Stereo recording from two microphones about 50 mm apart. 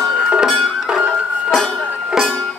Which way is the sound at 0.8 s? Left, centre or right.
Centre.